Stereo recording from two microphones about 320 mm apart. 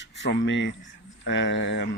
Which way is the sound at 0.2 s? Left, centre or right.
Left.